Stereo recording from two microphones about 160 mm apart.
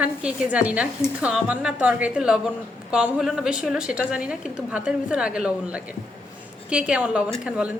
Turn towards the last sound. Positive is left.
turn(degrees=-5)  # may be behind; listen again after turning